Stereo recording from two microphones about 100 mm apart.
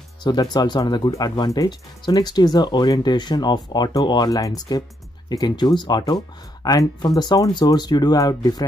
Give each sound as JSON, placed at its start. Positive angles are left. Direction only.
{"t": 0.2, "sound": "speech", "side_deg": 45}
{"t": 1.0, "sound": "speech", "side_deg": 35}